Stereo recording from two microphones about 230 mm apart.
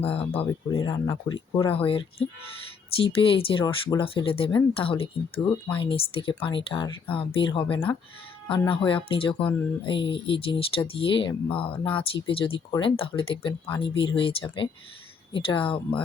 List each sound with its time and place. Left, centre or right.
0.0 s speech: left
0.8 s speech: centre